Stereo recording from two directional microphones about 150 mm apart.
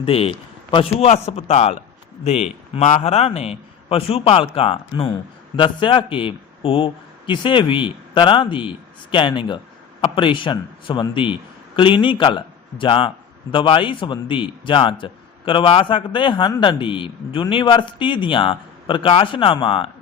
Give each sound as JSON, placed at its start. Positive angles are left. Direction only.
{"t": 0.0, "sound": "a man's voice", "side_deg": 40}